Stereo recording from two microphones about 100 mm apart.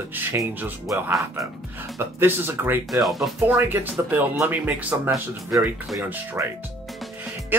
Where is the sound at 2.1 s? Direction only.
25° right (ahead or behind).